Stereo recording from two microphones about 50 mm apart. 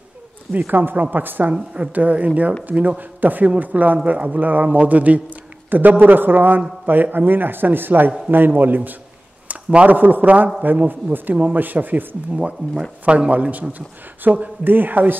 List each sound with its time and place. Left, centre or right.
0.5 s speech: right
1.5 s a woman's voice: right
9.5 s a sound: right
9.8 s speech: right
13.0 s speech: right